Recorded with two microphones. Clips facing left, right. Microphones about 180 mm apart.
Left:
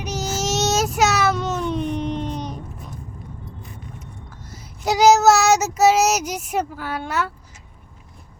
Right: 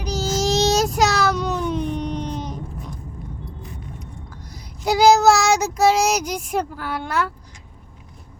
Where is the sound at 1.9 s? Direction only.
Centre (ahead or behind).